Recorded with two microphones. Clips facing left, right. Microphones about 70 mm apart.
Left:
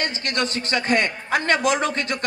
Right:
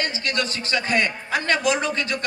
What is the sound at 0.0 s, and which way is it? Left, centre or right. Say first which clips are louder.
A man's voice: even; left.